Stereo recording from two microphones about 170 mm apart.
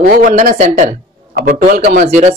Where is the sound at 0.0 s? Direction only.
55° right (ahead or behind).